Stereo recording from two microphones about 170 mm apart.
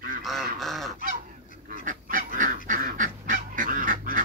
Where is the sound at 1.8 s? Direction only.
50° right (ahead or behind).